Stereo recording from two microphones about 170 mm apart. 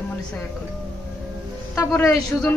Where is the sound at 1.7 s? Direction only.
15° left (ahead or behind).